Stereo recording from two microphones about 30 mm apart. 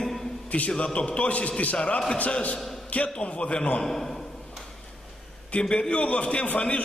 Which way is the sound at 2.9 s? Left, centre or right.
Left.